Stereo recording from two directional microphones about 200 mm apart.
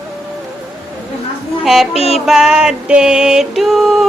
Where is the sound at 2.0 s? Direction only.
30° left (ahead or behind).